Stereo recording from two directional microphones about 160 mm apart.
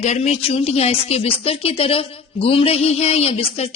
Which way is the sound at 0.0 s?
45° left (ahead or behind).